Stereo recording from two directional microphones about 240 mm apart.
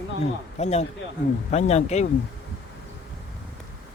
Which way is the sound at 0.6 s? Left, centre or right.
Left.